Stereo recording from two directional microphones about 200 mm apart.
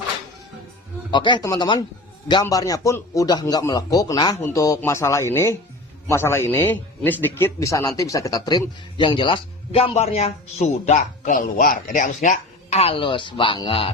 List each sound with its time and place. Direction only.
1.1 s a man's voice: 25° left (ahead or behind)